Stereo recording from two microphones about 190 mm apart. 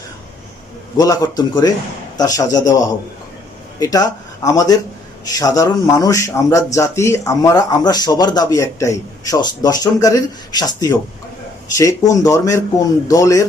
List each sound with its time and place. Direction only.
0.9 s a man's voice: 20° left (ahead or behind)